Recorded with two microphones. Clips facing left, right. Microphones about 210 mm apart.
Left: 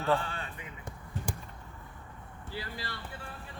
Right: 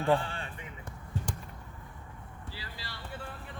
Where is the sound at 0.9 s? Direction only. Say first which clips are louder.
Even; 10° left (ahead or behind).